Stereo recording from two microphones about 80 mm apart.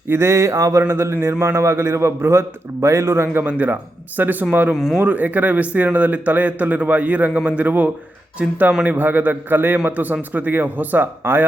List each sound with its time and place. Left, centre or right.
0.1 s a man's voice: right
3.4 s speech: right
4.7 s speech: centre
4.9 s speech: right